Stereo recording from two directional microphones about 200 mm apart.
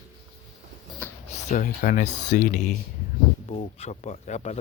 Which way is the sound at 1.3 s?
35° left (ahead or behind).